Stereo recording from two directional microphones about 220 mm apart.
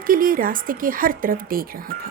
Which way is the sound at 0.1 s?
40° right (ahead or behind).